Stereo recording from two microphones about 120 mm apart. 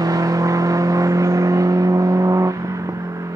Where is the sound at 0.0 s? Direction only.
30° right (ahead or behind).